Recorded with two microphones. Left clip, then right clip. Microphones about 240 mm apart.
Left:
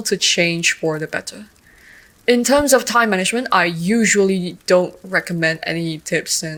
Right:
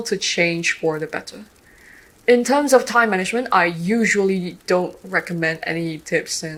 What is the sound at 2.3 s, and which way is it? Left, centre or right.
Speech, left.